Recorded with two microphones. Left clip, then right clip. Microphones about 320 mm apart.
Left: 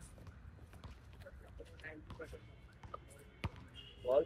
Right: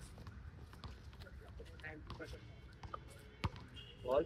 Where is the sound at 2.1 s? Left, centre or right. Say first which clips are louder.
Even; right.